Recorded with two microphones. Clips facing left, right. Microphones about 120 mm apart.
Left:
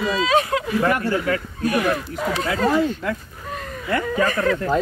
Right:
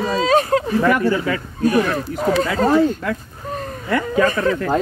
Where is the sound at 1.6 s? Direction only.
35° right (ahead or behind).